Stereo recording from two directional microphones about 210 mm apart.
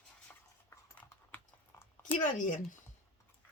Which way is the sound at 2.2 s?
40° left (ahead or behind).